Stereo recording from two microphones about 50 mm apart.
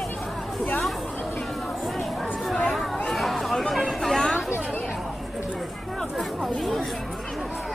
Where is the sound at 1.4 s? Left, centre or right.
Centre.